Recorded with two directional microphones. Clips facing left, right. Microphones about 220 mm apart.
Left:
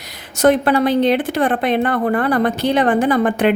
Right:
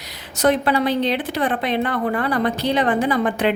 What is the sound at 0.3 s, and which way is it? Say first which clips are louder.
A woman's voice: left 4 dB; 50° left (ahead or behind).